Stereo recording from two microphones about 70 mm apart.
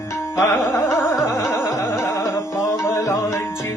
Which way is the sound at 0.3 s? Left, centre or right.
Left.